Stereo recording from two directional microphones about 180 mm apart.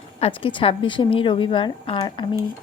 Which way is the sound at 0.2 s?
30° left (ahead or behind).